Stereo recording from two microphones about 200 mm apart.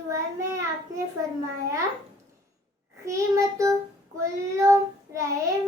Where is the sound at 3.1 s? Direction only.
15° right (ahead or behind).